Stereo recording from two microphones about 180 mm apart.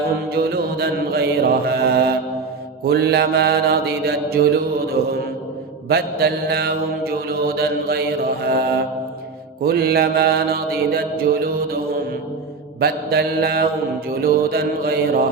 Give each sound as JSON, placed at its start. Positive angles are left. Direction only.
{"t": 0.3, "sound": "mantra", "side_deg": -60}
{"t": 5.9, "sound": "mantra", "side_deg": -60}
{"t": 12.8, "sound": "mantra", "side_deg": -60}